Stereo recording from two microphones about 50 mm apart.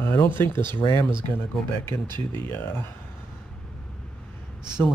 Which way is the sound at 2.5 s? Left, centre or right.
Left.